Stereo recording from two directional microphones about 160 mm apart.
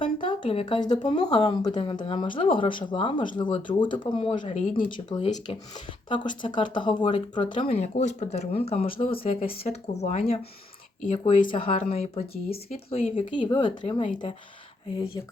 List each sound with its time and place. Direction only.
0.0 s speech: 30° left (ahead or behind)